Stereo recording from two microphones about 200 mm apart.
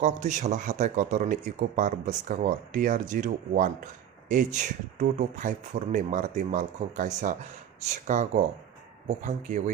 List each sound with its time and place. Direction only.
0.0 s speech: 35° right (ahead or behind)